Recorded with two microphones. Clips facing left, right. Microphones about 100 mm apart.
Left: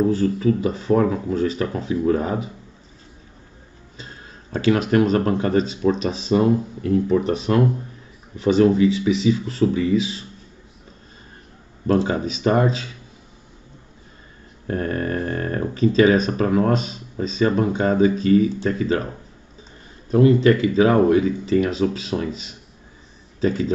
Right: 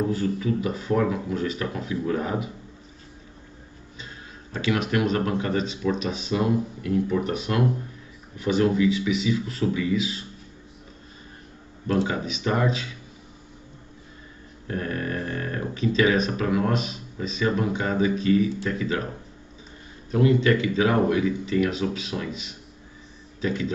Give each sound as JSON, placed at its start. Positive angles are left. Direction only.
{"t": 0.1, "sound": "speech", "side_deg": 35}
{"t": 4.0, "sound": "speech", "side_deg": 35}
{"t": 11.9, "sound": "speech", "side_deg": 35}
{"t": 14.7, "sound": "speech", "side_deg": 40}
{"t": 20.1, "sound": "speech", "side_deg": 40}